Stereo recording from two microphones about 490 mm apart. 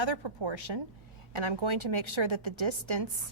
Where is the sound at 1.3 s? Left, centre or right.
Right.